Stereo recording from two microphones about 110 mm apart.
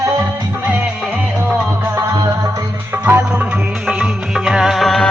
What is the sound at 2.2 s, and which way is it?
Music, 30° right (ahead or behind).